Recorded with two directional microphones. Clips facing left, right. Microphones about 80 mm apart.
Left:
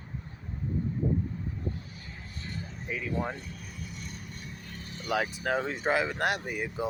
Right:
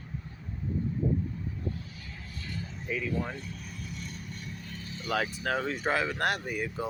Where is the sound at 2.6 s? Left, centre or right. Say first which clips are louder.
Right 2 dB; left.